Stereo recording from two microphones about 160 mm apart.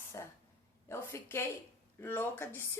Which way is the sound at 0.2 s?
20° left (ahead or behind).